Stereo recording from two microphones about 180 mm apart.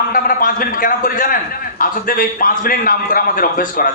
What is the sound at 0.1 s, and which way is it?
A man's voice, 50° left (ahead or behind).